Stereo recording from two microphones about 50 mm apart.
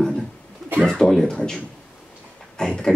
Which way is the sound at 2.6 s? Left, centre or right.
Centre.